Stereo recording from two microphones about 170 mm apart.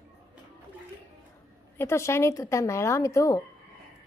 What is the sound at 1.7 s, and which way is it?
Speech, 15° left (ahead or behind).